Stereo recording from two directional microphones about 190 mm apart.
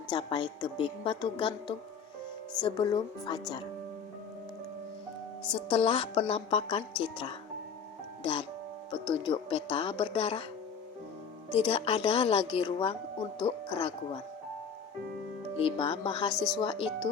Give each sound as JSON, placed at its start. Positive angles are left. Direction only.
{"t": 0.1, "sound": "speech", "side_deg": 25}
{"t": 5.5, "sound": "speech", "side_deg": 30}
{"t": 11.5, "sound": "speech", "side_deg": 30}
{"t": 15.5, "sound": "speech", "side_deg": 30}
{"t": 16.3, "sound": "speech", "side_deg": 5}
{"t": 16.6, "sound": "speech", "side_deg": 30}